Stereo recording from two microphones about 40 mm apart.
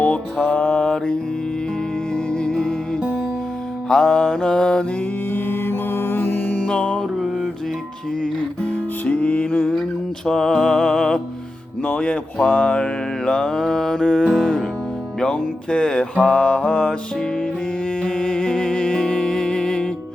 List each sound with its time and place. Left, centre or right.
0.0 s music: left; by 3.0 s centre
3.8 s mantra: centre
5.3 s music: left
6.6 s music: left
8.6 s music: left
10.2 s music: centre
11.9 s speech: left
12.8 s music: left
15.3 s mantra: left
18.0 s music: left